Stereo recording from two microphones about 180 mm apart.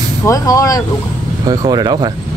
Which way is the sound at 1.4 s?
20° right (ahead or behind).